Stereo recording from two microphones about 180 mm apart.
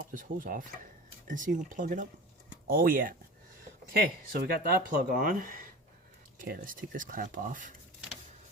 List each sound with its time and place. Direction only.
0.0 s speech: 50° right (ahead or behind)